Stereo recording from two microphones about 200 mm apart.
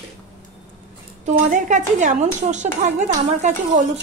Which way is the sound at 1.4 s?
40° right (ahead or behind).